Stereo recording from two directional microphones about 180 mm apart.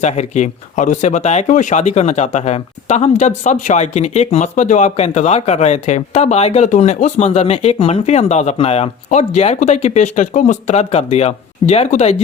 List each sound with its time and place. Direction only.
0.0 s speech: 40° left (ahead or behind)